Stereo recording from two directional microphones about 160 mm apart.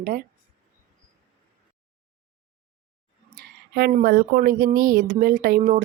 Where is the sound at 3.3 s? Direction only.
90° right.